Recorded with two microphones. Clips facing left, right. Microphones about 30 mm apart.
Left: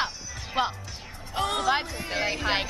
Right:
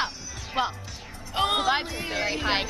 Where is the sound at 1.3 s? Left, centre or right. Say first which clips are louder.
Right 3 dB; right.